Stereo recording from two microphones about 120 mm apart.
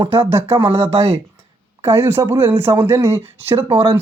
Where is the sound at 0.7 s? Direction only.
55° right (ahead or behind).